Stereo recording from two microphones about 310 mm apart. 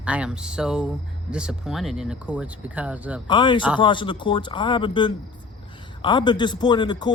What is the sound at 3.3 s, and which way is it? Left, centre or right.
Speech, centre.